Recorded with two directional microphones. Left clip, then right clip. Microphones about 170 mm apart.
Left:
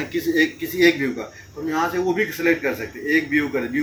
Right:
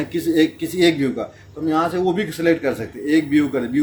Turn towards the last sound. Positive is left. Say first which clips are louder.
# right 3 dB
turn(degrees=-90)